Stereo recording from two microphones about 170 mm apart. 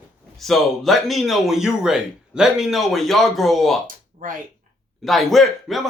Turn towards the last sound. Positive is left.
turn(degrees=0)  # may be behind; listen again after turning